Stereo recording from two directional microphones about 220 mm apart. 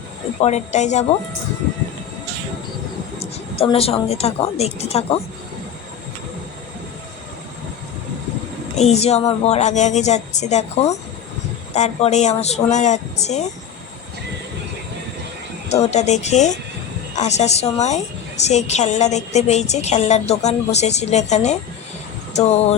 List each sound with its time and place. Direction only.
0.4 s a woman's voice: 30° left (ahead or behind)
3.2 s a woman's voice: 25° left (ahead or behind)
8.8 s a woman's voice: 30° left (ahead or behind)
15.7 s a woman's voice: 30° left (ahead or behind)